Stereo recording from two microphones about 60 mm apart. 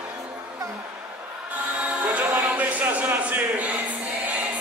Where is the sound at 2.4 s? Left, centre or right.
Right.